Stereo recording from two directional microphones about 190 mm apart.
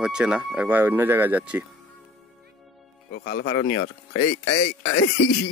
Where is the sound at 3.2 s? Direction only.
65° left (ahead or behind).